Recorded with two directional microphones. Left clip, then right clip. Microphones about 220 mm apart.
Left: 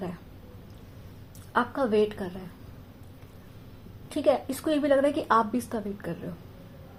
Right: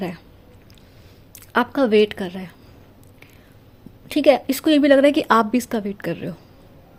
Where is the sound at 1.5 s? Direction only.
40° right (ahead or behind).